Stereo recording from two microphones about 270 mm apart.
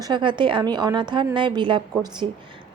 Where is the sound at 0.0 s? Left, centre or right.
Centre.